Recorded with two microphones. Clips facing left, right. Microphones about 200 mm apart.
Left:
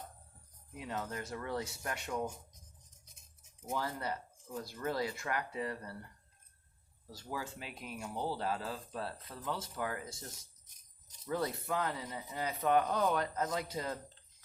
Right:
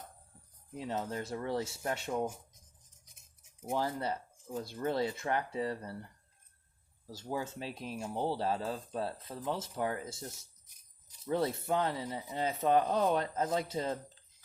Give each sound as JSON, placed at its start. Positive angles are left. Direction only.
{"t": 0.8, "sound": "speech", "side_deg": -30}
{"t": 3.7, "sound": "speech", "side_deg": -25}
{"t": 7.1, "sound": "speech", "side_deg": -25}
{"t": 11.3, "sound": "speech", "side_deg": -25}